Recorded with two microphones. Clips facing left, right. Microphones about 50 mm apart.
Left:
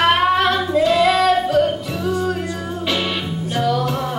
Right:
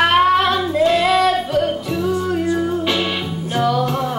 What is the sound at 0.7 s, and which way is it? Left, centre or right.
Singing, right.